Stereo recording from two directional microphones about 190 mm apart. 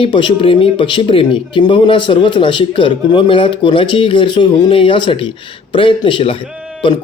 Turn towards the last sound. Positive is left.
turn(degrees=25)  # may be behind; listen again after turning